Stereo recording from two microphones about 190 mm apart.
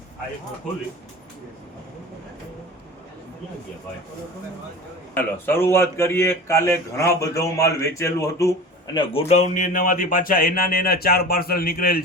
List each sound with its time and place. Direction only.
5.1 s speech: 10° left (ahead or behind); by 12.0 s 50° left (ahead or behind)